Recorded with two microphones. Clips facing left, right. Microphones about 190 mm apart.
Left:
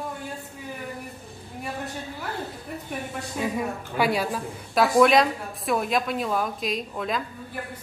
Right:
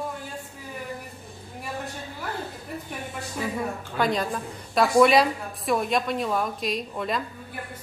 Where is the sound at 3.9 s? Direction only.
10° left (ahead or behind).